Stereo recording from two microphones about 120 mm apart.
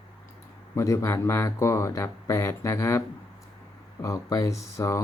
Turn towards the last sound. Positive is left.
turn(degrees=25)  # may be behind; listen again after turning